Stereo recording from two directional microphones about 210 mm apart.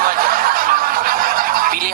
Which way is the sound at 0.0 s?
45° right (ahead or behind).